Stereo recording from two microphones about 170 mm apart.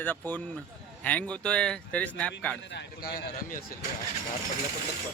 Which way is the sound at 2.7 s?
65° left (ahead or behind).